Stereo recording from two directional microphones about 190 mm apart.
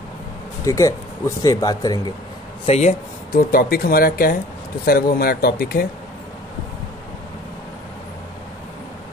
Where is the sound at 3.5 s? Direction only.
50° left (ahead or behind).